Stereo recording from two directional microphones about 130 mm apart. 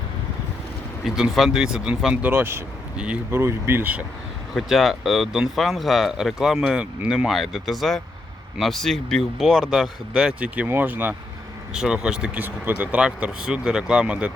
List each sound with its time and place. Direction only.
1.0 s speech: 5° right (ahead or behind)
4.5 s speech: centre (ahead or behind)